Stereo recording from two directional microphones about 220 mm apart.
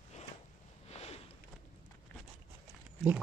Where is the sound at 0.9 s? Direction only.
25° left (ahead or behind).